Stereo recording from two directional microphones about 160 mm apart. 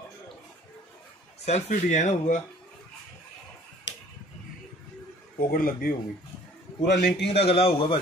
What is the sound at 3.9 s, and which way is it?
Arrow, 90° left.